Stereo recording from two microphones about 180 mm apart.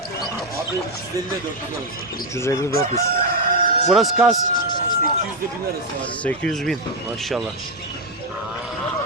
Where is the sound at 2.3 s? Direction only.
15° left (ahead or behind).